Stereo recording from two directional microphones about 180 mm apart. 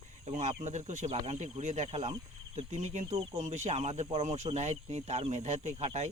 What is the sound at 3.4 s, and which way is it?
Speech, 40° right (ahead or behind).